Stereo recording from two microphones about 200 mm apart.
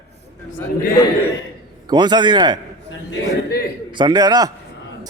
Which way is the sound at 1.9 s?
20° right (ahead or behind).